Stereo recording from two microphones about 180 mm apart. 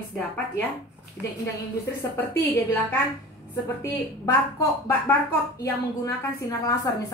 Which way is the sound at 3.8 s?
15° left (ahead or behind).